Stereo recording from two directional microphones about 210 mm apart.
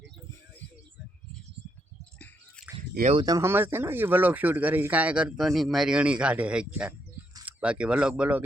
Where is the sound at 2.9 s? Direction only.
35° right (ahead or behind).